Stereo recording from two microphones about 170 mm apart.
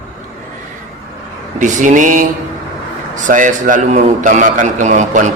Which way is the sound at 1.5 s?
45° right (ahead or behind).